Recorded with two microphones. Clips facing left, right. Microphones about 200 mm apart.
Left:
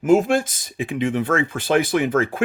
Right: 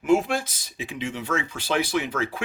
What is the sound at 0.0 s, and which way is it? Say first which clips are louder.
Speech: left 5 dB; 45° left (ahead or behind).